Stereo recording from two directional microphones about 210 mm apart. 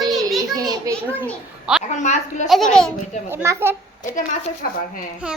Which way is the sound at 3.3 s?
10° right (ahead or behind).